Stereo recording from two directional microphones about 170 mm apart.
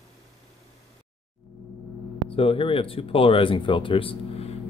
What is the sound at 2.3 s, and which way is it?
Speech, 35° left (ahead or behind).